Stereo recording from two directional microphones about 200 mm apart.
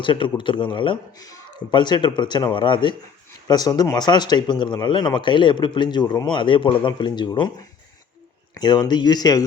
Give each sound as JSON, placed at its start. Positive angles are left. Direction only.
{"t": 0.0, "sound": "speech", "side_deg": 25}
{"t": 8.5, "sound": "speech", "side_deg": 20}